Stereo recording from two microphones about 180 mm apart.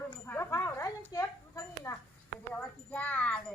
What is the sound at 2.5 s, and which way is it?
Wind chime, 10° left (ahead or behind).